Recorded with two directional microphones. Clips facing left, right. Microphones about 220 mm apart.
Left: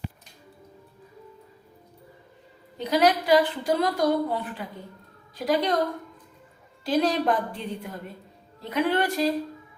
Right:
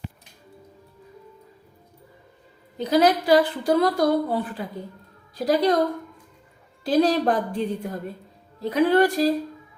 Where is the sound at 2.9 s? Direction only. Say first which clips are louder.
Right 3 dB; 40° right (ahead or behind).